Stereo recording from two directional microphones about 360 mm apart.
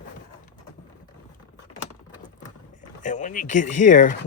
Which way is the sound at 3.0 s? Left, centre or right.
Left.